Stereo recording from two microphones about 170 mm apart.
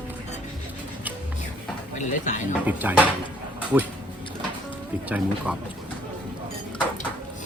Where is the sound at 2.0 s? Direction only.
45° left (ahead or behind).